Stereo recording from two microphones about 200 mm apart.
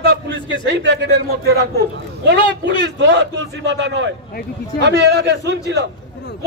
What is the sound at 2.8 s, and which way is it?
A man's voice, 60° right (ahead or behind).